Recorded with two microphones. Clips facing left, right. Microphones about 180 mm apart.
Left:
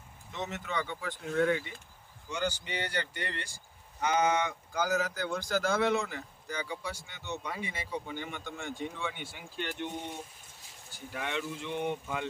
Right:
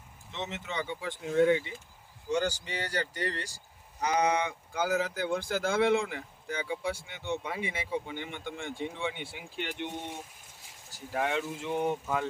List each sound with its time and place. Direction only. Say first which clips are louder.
0.3 s speech: even; 25° right (ahead or behind)
2.3 s speech: right 4 dB; 40° right (ahead or behind); by 9.9 s 20° right (ahead or behind)
10.9 s speech: right 5 dB; 40° right (ahead or behind)